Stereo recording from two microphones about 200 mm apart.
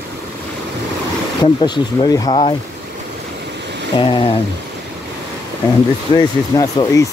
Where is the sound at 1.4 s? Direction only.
20° left (ahead or behind).